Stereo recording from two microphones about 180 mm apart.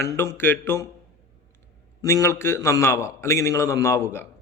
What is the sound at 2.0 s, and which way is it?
A man's voice, 15° left (ahead or behind).